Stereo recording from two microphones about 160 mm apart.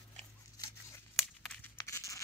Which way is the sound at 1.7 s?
20° left (ahead or behind).